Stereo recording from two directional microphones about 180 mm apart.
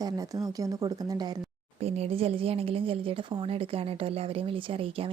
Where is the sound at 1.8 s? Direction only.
35° right (ahead or behind).